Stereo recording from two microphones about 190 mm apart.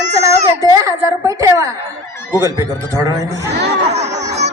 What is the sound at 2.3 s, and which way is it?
A woman's voice, 10° right (ahead or behind).